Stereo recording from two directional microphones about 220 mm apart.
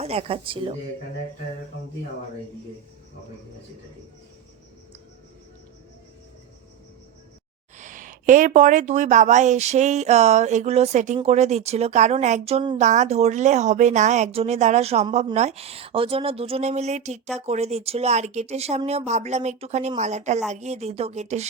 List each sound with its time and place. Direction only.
0.0 s speech: 25° right (ahead or behind)
7.8 s speech: 35° right (ahead or behind)